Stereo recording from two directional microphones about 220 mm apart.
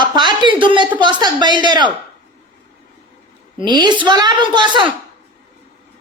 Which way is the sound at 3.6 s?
20° right (ahead or behind).